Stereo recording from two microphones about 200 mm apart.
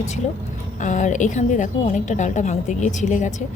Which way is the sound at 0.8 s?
40° left (ahead or behind).